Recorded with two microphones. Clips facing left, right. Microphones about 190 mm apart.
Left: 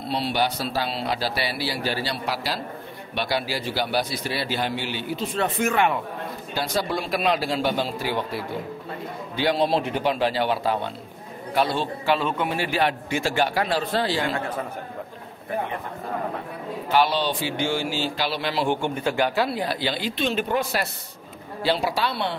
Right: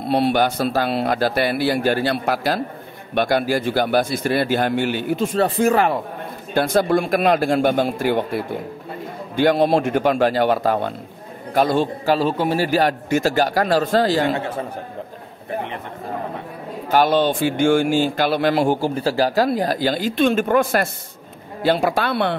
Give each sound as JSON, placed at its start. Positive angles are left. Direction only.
{"t": 0.0, "sound": "a man's voice", "side_deg": -55}
{"t": 6.5, "sound": "a man's voice", "side_deg": -50}
{"t": 14.2, "sound": "speech", "side_deg": -25}
{"t": 16.9, "sound": "a man's voice", "side_deg": -50}
{"t": 18.8, "sound": "a man's voice", "side_deg": -35}